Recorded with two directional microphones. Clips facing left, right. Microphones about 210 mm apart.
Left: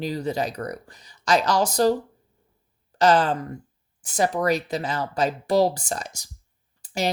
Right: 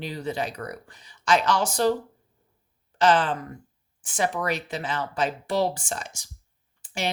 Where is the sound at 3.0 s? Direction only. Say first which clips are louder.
Left 2 dB; 40° left (ahead or behind).